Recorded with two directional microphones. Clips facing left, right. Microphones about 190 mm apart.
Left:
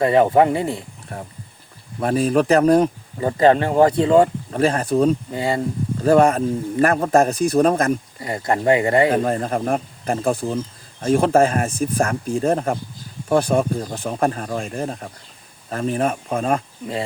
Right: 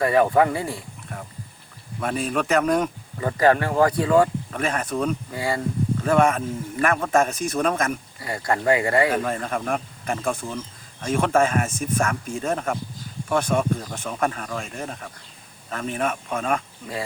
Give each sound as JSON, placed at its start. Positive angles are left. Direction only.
{"t": 0.0, "sound": "speech", "side_deg": 25}
{"t": 1.1, "sound": "speech", "side_deg": 35}
{"t": 6.0, "sound": "speech", "side_deg": 35}
{"t": 8.2, "sound": "speech", "side_deg": 20}
{"t": 9.1, "sound": "speech", "side_deg": 35}